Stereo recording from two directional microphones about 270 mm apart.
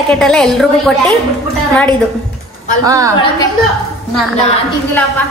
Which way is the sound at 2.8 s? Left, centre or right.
Centre.